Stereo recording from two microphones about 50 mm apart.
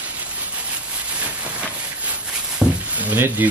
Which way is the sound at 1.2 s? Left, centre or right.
Right.